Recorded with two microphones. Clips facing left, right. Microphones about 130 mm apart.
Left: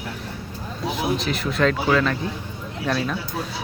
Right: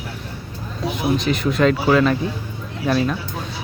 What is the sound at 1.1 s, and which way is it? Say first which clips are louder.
Speech: right 5 dB; centre (ahead or behind).